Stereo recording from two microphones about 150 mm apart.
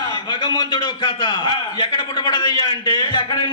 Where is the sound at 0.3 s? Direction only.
30° left (ahead or behind).